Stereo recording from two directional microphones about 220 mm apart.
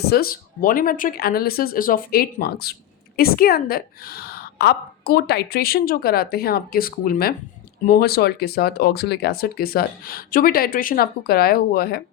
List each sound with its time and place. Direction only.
0.0 s speech: 45° left (ahead or behind)